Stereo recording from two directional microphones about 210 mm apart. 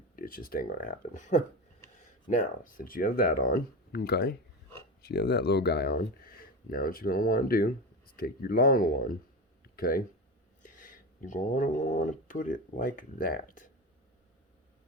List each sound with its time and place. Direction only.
0.2 s speech: 45° left (ahead or behind)